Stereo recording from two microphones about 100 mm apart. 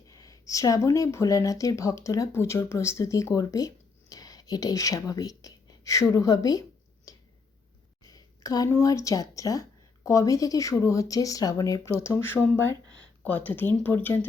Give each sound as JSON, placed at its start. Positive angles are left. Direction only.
{"t": 0.1, "sound": "speech", "side_deg": 35}
{"t": 4.1, "sound": "a sound", "side_deg": 40}
{"t": 8.7, "sound": "speech", "side_deg": 35}